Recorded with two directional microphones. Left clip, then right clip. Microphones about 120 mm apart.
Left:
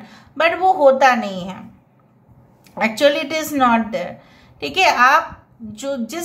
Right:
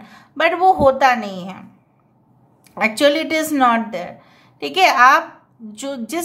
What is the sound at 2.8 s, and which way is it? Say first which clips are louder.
A woman's voice: even; 40° right (ahead or behind).